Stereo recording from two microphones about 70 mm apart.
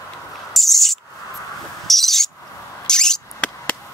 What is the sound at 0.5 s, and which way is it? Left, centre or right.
Owl, centre.